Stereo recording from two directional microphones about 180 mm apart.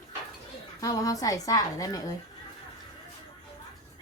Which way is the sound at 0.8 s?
20° left (ahead or behind).